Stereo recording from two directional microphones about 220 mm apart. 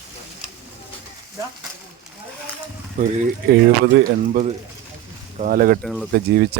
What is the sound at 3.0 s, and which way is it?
Speech, 40° right (ahead or behind).